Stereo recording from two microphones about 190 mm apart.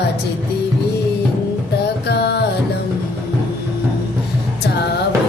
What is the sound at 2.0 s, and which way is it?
Music, 60° left (ahead or behind).